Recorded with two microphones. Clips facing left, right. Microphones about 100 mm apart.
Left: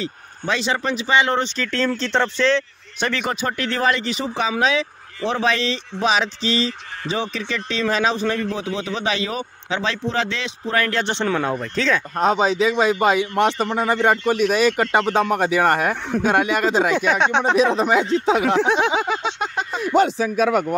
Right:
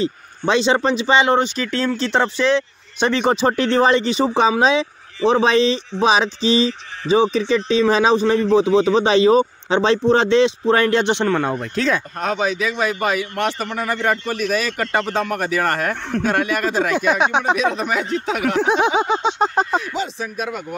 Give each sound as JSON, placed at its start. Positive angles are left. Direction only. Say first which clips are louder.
{"t": 0.0, "sound": "speech", "louder": "right 7 dB", "side_deg": -25}
{"t": 11.2, "sound": "speech", "louder": "right 2 dB", "side_deg": 0}
{"t": 12.2, "sound": "speech", "louder": "left 3 dB", "side_deg": 25}
{"t": 17.0, "sound": "speech", "louder": "right 1 dB", "side_deg": -10}
{"t": 17.6, "sound": "speech", "louder": "left 3 dB", "side_deg": 25}
{"t": 18.7, "sound": "speech", "louder": "right 2 dB", "side_deg": -20}
{"t": 19.5, "sound": "speech", "louder": "right 7 dB", "side_deg": -40}
{"t": 19.8, "sound": "speech", "louder": "left 8 dB", "side_deg": 55}